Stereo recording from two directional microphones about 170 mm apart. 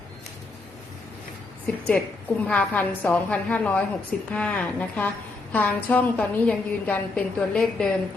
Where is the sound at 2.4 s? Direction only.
5° left (ahead or behind).